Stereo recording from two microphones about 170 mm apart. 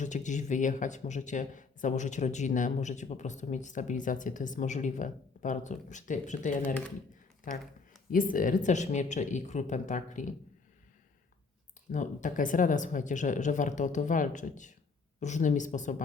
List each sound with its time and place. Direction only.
0.0 s speech: 45° left (ahead or behind)
11.9 s speech: 45° left (ahead or behind)